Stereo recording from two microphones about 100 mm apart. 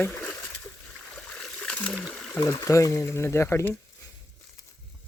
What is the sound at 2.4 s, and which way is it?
Speech, 30° left (ahead or behind).